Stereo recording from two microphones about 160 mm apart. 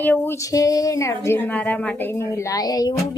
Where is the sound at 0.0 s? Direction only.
10° left (ahead or behind).